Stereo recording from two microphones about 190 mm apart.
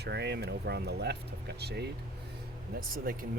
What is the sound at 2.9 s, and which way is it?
Speech, 50° right (ahead or behind).